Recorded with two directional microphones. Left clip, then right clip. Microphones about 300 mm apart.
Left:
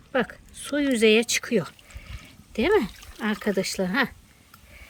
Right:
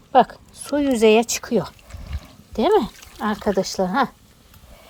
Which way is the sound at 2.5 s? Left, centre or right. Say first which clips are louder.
Right 4 dB; centre.